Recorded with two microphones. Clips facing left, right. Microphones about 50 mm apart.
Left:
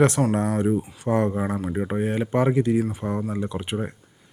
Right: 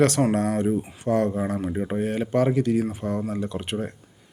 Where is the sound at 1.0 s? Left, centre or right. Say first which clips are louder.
Even; left.